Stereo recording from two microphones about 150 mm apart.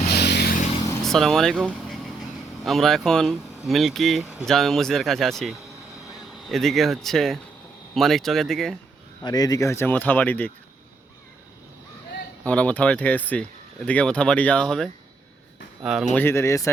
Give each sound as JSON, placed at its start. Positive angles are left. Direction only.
{"t": 0.1, "sound": "vehicle", "side_deg": 90}
{"t": 1.0, "sound": "speech", "side_deg": 0}
{"t": 9.2, "sound": "speech", "side_deg": 25}
{"t": 12.5, "sound": "speech", "side_deg": 10}
{"t": 16.1, "sound": "speech", "side_deg": 15}